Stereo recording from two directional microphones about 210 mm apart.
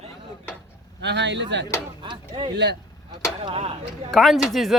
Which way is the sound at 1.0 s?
55° right (ahead or behind).